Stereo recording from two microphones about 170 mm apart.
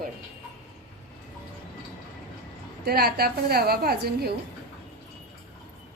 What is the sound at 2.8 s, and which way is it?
A woman's voice, 65° right (ahead or behind).